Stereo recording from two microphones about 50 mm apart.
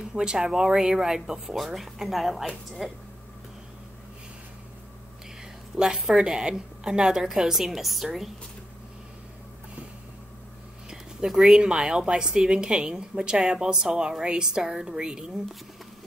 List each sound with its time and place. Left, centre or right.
0.0 s a woman's voice: centre
5.8 s a woman's voice: centre
10.9 s a woman's voice: centre